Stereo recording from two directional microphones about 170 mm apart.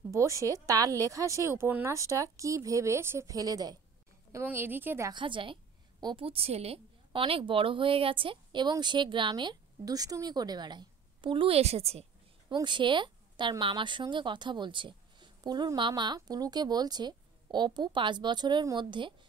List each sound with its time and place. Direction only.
0.1 s a woman's voice: 20° right (ahead or behind)
5.1 s a woman's voice: 30° right (ahead or behind)
12.5 s a woman's voice: 30° right (ahead or behind)